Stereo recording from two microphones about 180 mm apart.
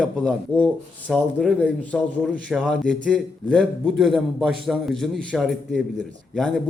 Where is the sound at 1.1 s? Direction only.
Centre (ahead or behind).